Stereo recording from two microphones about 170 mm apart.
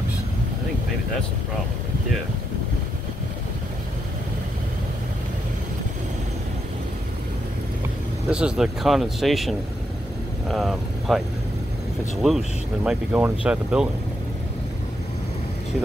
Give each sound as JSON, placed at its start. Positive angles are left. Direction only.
{"t": 8.3, "sound": "speech", "side_deg": -5}